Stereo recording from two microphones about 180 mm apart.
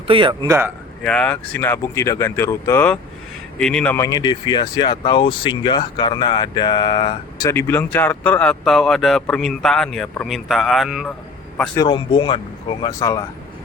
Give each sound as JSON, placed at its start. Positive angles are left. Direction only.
{"t": 0.1, "sound": "speech", "side_deg": -25}
{"t": 0.4, "sound": "speech", "side_deg": -15}
{"t": 1.0, "sound": "speech", "side_deg": 5}
{"t": 3.9, "sound": "speech", "side_deg": 20}
{"t": 11.7, "sound": "speech", "side_deg": 25}